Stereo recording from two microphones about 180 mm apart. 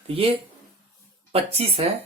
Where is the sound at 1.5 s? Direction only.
35° right (ahead or behind).